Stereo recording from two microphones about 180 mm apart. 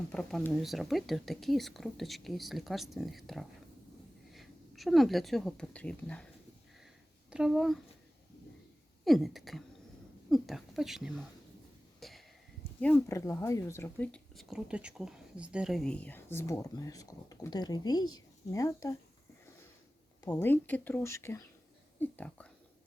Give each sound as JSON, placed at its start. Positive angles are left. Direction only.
{"t": 0.1, "sound": "speech", "side_deg": 5}
{"t": 7.3, "sound": "speech", "side_deg": -5}
{"t": 9.0, "sound": "speech", "side_deg": 0}
{"t": 11.9, "sound": "a sound", "side_deg": 0}
{"t": 12.8, "sound": "speech", "side_deg": 10}
{"t": 20.2, "sound": "speech", "side_deg": 10}